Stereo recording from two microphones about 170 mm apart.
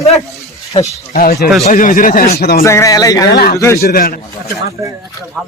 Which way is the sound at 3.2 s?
70° left (ahead or behind).